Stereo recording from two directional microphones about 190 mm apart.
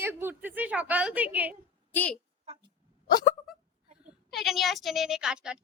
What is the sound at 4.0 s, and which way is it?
Speech, 5° right (ahead or behind).